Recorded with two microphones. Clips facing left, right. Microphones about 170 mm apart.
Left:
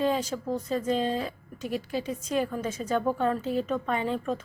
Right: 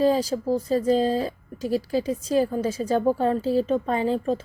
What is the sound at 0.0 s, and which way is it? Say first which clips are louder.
Speech: right 6 dB; 35° right (ahead or behind).